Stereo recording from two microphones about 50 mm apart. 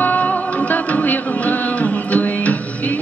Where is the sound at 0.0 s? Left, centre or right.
Left.